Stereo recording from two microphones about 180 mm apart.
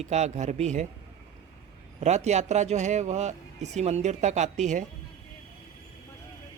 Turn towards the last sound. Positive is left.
turn(degrees=-40)  # may be behind; listen again after turning